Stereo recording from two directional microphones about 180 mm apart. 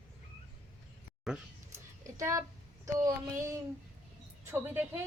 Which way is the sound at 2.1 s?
15° right (ahead or behind).